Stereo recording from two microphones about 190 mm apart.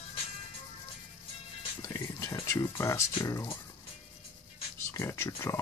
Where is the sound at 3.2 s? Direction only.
15° left (ahead or behind).